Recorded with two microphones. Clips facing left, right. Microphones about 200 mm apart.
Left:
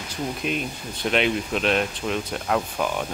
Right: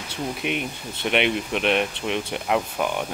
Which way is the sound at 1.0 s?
5° right (ahead or behind).